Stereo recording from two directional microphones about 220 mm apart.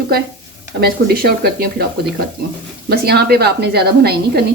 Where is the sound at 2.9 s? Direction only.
45° right (ahead or behind).